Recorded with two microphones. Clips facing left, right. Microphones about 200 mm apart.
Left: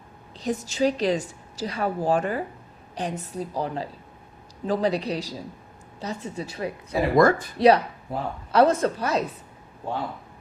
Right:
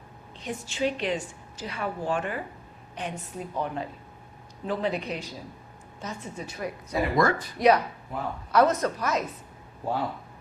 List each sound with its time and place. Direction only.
0.3 s a woman's voice: 40° left (ahead or behind)
7.2 s speech: 50° left (ahead or behind)
7.6 s a woman's voice: 30° left (ahead or behind)